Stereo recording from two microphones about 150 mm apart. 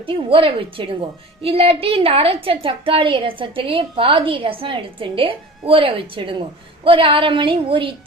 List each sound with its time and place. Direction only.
0.0 s a woman's voice: 35° right (ahead or behind)